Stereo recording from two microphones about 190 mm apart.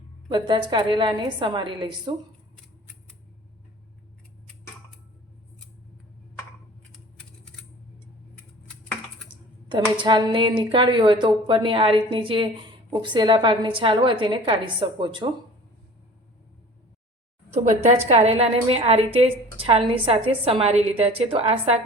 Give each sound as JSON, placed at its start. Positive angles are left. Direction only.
{"t": 0.3, "sound": "speech", "side_deg": -25}
{"t": 9.6, "sound": "speech", "side_deg": -25}
{"t": 17.5, "sound": "a woman's voice", "side_deg": -35}